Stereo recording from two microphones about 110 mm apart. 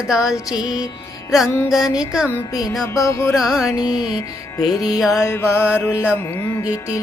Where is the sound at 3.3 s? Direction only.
5° right (ahead or behind).